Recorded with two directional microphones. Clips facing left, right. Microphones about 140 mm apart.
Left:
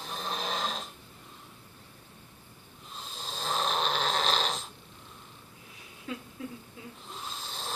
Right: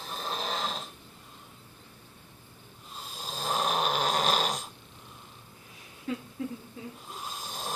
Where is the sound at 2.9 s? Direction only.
10° right (ahead or behind).